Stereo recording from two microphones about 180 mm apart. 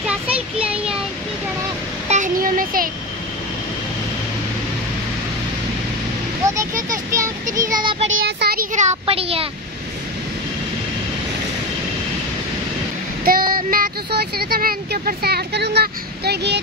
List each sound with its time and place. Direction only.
0.0 s child singing: 5° right (ahead or behind)
2.0 s a sound: 45° right (ahead or behind)
6.4 s a sound: 15° right (ahead or behind)
7.5 s child singing: 20° right (ahead or behind)
8.2 s speech: 65° right (ahead or behind)
8.7 s speech: 35° right (ahead or behind)
13.2 s speech: 55° right (ahead or behind)